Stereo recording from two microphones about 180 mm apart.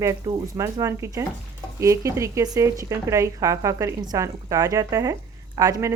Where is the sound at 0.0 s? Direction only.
20° right (ahead or behind).